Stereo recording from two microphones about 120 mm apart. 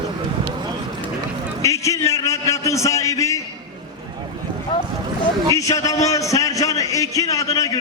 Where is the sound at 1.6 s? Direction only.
25° left (ahead or behind).